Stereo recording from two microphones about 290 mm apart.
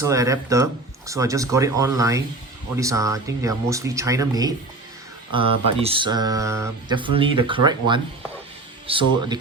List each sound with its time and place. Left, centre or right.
0.0 s speech: centre